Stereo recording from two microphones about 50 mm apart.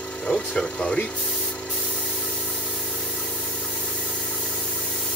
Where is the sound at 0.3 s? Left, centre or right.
Centre.